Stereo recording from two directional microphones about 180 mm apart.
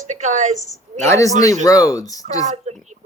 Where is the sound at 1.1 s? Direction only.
15° left (ahead or behind).